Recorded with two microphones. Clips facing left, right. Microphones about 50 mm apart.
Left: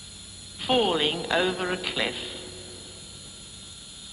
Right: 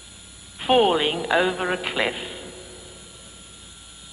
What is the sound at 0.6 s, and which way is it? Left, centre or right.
A woman's voice, right.